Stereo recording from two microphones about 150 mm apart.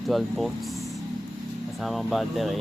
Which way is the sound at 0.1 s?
Centre (ahead or behind).